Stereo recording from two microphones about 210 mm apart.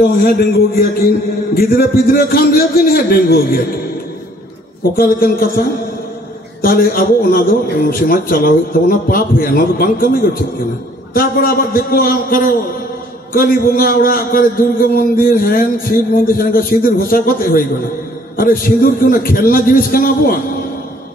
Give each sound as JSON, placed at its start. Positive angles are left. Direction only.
{"t": 0.0, "sound": "a man's voice", "side_deg": 45}
{"t": 4.9, "sound": "a man's voice", "side_deg": 45}
{"t": 6.6, "sound": "a man's voice", "side_deg": 45}
{"t": 11.1, "sound": "a man's voice", "side_deg": 45}